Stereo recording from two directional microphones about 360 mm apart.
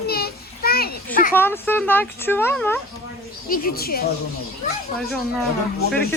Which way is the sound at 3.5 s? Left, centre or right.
Left.